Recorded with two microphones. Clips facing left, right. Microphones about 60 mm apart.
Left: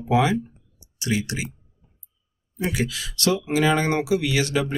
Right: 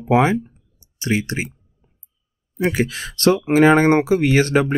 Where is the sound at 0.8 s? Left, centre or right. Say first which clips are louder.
Right 4 dB; right.